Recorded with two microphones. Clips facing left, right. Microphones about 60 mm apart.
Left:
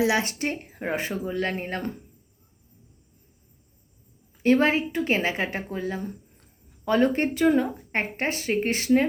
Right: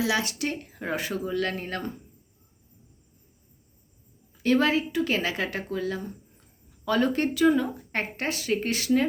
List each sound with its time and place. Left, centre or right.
0.0 s speech: left
4.4 s a woman's voice: left